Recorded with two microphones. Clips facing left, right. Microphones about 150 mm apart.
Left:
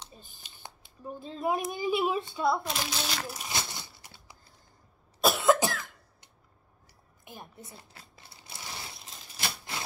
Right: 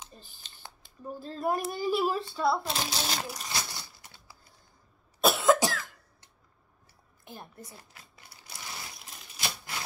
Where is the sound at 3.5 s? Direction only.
20° left (ahead or behind).